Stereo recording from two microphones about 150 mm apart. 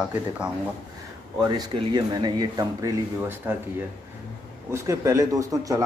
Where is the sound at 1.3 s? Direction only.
25° right (ahead or behind).